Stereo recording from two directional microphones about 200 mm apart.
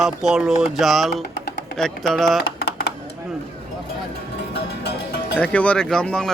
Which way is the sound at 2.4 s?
50° left (ahead or behind).